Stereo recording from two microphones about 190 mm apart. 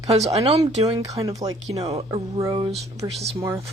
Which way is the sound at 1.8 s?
30° right (ahead or behind).